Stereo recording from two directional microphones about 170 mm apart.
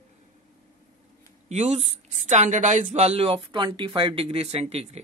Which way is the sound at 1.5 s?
40° right (ahead or behind).